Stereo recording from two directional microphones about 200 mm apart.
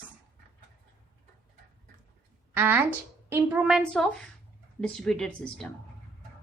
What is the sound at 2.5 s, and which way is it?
A woman's voice, 10° right (ahead or behind).